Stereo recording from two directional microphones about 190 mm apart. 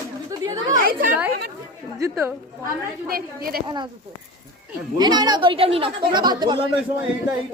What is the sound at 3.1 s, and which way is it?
Speech, 50° right (ahead or behind).